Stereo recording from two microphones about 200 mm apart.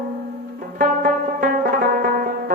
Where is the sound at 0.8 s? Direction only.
45° right (ahead or behind).